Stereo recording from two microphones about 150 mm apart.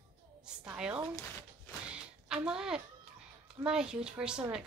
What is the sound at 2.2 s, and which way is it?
Speech, 5° right (ahead or behind).